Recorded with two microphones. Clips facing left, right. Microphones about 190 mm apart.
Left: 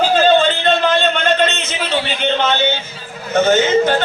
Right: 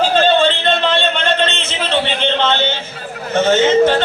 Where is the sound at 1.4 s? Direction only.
30° right (ahead or behind).